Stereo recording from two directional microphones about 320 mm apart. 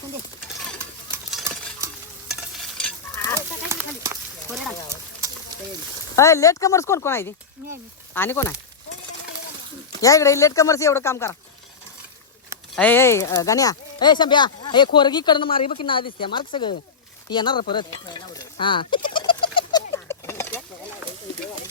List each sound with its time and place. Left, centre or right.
1.1 s stir: centre
3.3 s horse: centre
6.1 s speech: centre
10.0 s speech: centre
12.7 s speech: centre
17.2 s a sound: centre